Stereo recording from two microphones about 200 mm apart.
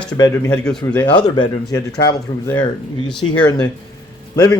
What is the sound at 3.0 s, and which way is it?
Speech, 5° left (ahead or behind).